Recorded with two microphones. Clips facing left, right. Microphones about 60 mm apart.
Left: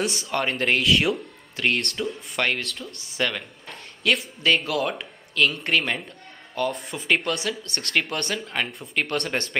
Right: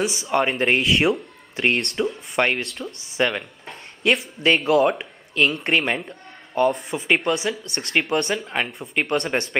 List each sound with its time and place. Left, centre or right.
0.0 s speech: centre